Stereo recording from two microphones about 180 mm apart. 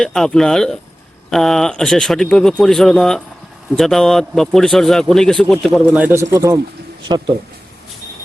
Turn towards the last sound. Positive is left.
turn(degrees=-25)  # may be behind; listen again after turning